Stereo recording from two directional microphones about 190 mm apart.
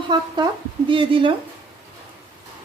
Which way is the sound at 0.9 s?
25° right (ahead or behind).